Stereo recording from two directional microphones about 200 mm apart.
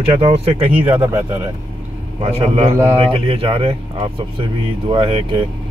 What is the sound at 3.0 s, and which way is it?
Speech, 30° right (ahead or behind).